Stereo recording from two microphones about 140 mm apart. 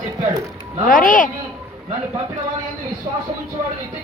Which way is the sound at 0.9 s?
70° left (ahead or behind).